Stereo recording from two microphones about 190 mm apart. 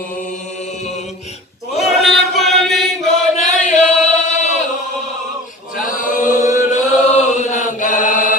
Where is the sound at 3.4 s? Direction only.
40° left (ahead or behind).